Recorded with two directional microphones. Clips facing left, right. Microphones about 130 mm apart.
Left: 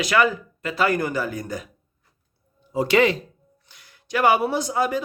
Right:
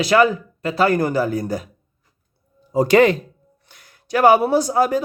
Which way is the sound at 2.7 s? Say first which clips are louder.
Right 5 dB; 45° right (ahead or behind).